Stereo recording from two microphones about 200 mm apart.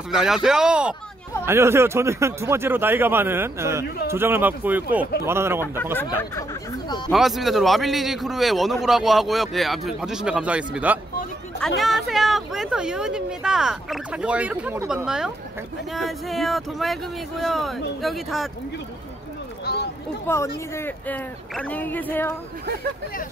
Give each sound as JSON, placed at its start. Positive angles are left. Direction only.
{"t": 0.1, "sound": "a man's voice", "side_deg": -5}
{"t": 7.1, "sound": "a man's voice", "side_deg": 0}
{"t": 19.6, "sound": "a sound", "side_deg": 55}
{"t": 20.2, "sound": "speech", "side_deg": 10}